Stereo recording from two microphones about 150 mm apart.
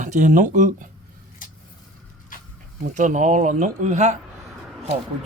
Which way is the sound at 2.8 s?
55° right (ahead or behind).